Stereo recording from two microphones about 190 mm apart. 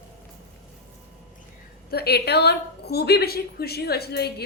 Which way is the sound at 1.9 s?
55° left (ahead or behind).